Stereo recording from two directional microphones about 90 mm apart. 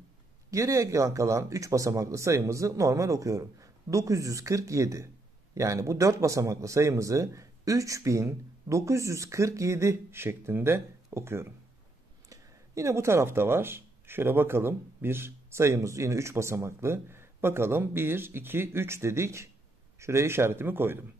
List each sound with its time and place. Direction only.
0.5 s speech: 35° right (ahead or behind)